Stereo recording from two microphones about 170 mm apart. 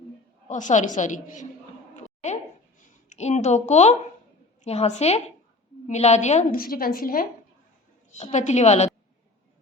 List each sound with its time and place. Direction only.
0.4 s a woman's voice: 45° left (ahead or behind)
2.0 s a sound: 45° left (ahead or behind)
3.1 s a woman's voice: 40° left (ahead or behind)
6.6 s a woman's voice: 60° left (ahead or behind)
8.2 s a woman's voice: 45° left (ahead or behind)